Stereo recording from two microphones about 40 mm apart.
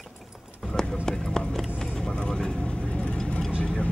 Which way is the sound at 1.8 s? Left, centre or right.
Centre.